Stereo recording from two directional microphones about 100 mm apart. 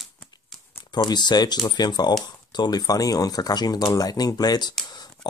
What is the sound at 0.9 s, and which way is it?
Speech, 45° left (ahead or behind).